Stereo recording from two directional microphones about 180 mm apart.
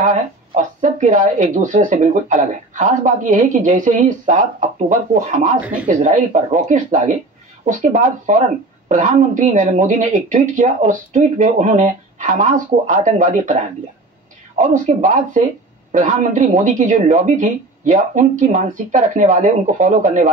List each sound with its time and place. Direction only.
0.0 s speech: 45° right (ahead or behind)
14.6 s speech: 45° right (ahead or behind)